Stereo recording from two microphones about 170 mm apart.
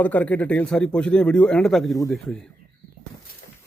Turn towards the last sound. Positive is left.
turn(degrees=55)  # may be behind; listen again after turning